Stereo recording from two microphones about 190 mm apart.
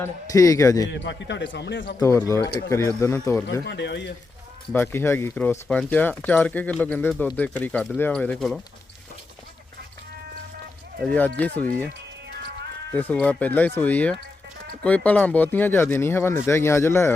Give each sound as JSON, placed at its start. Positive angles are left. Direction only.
{"t": 0.0, "sound": "speech", "side_deg": 15}
{"t": 0.9, "sound": "a man's voice", "side_deg": 70}
{"t": 2.0, "sound": "speech", "side_deg": 15}
{"t": 3.7, "sound": "a man's voice", "side_deg": 65}
{"t": 4.7, "sound": "speech", "side_deg": 10}
{"t": 11.0, "sound": "speech", "side_deg": 10}
{"t": 12.9, "sound": "speech", "side_deg": 10}